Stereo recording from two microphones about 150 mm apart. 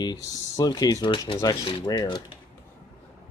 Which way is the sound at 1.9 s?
30° left (ahead or behind).